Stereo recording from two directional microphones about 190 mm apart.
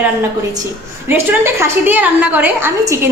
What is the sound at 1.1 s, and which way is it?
A woman's voice, 10° right (ahead or behind).